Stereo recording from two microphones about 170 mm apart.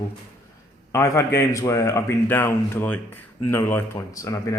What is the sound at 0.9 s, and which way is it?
Speech, 15° left (ahead or behind).